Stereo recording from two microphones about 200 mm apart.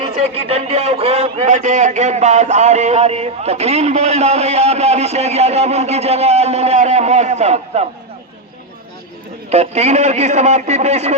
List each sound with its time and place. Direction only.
0.0 s a man's voice: 30° right (ahead or behind)
9.5 s a man's voice: 35° right (ahead or behind)